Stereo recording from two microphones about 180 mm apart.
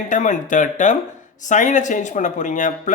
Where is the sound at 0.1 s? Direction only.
45° left (ahead or behind).